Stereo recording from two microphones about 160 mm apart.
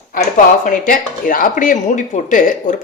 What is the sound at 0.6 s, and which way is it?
Speech, 60° left (ahead or behind).